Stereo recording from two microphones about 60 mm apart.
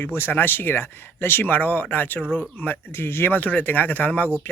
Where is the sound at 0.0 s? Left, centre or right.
Left.